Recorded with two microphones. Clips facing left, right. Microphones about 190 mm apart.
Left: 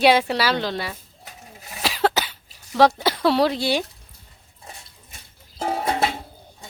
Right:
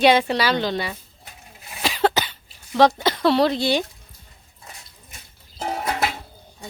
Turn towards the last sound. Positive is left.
turn(degrees=30)  # may be behind; listen again after turning